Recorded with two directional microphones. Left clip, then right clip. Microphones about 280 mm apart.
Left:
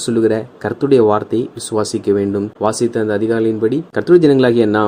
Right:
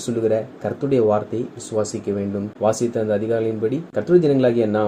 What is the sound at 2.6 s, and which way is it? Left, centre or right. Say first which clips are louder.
Speech: left 2 dB; left.